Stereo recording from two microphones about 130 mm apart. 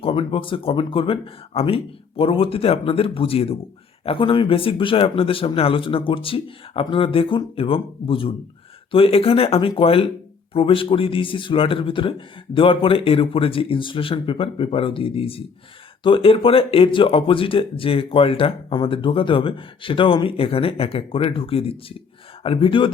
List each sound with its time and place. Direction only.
0.0 s speech: 40° left (ahead or behind)